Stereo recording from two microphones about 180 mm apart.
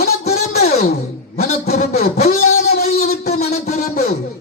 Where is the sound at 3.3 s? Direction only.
40° left (ahead or behind).